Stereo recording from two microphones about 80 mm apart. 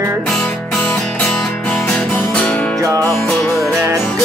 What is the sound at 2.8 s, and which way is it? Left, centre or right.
Music, right.